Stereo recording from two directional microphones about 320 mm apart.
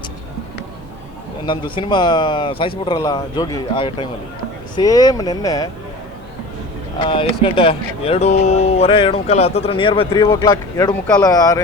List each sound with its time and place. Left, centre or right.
1.5 s speech: centre
7.0 s speech: centre